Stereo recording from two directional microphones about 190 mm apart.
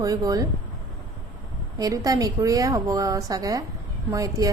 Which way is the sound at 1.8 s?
20° right (ahead or behind).